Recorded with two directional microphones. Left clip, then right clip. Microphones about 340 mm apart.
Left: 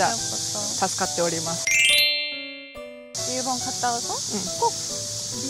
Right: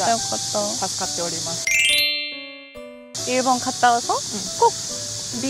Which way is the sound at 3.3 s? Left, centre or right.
Right.